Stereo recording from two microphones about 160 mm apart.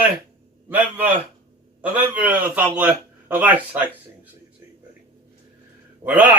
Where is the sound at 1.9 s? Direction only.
10° right (ahead or behind).